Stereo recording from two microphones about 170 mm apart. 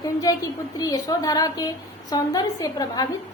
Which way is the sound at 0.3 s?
20° left (ahead or behind).